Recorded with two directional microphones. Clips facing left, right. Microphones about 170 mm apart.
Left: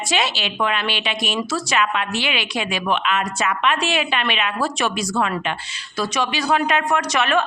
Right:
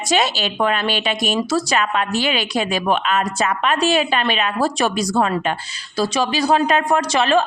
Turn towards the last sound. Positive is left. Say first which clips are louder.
# right 3 dB
turn(degrees=-30)  # may be behind; listen again after turning